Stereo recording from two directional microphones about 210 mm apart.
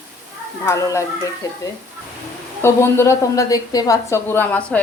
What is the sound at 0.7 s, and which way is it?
Speech, 15° left (ahead or behind).